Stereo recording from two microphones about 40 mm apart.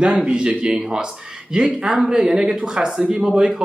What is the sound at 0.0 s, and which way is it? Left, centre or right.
Speech, right.